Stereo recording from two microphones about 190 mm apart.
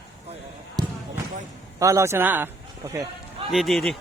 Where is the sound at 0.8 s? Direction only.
20° right (ahead or behind).